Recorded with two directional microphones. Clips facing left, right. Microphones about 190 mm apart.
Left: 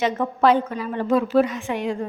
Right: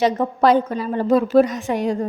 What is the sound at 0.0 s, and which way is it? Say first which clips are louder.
A woman's voice: right 2 dB; 40° right (ahead or behind).